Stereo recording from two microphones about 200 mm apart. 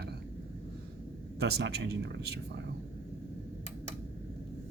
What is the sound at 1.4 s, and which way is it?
Speech, 55° right (ahead or behind).